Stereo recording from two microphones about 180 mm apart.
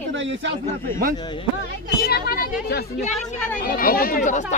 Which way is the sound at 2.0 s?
60° left (ahead or behind).